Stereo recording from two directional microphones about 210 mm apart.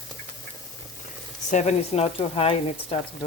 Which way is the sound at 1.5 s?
35° left (ahead or behind).